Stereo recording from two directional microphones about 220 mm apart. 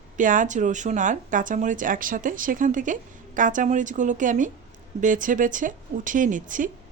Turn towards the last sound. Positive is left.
turn(degrees=-35)  # may be behind; listen again after turning